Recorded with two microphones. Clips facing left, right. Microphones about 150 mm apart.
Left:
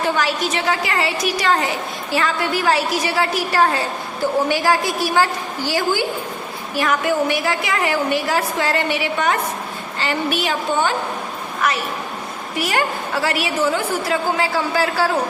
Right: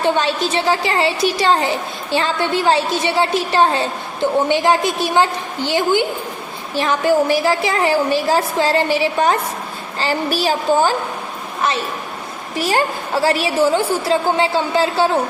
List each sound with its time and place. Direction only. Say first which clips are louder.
0.0 s a woman's voice: right 3 dB; 25° right (ahead or behind)